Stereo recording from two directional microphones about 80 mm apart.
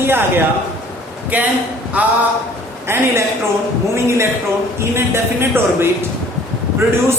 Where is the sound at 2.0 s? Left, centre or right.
Centre.